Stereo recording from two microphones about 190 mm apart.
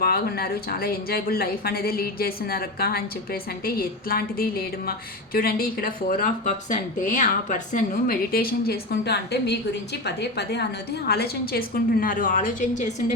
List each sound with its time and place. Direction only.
0.0 s a woman's voice: 55° left (ahead or behind)